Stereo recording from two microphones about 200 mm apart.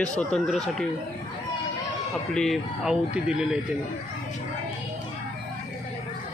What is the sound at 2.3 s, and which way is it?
Speech, centre (ahead or behind).